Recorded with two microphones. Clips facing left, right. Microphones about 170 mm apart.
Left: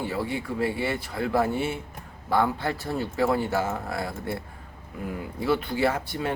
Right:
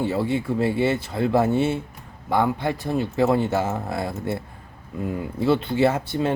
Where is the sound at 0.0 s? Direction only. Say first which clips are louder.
Right 6 dB; 25° right (ahead or behind).